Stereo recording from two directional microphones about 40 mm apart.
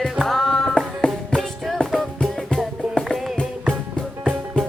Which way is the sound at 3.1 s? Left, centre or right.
Centre.